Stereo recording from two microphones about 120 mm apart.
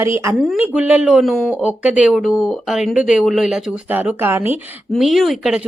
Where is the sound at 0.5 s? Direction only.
10° right (ahead or behind).